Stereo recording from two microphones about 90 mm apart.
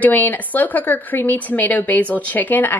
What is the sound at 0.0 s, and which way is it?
Speech, 20° left (ahead or behind).